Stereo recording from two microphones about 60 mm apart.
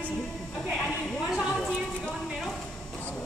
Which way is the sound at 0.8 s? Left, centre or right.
Centre.